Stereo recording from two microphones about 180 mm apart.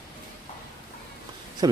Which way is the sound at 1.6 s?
20° right (ahead or behind).